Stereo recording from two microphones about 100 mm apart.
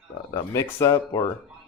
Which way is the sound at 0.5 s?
30° left (ahead or behind).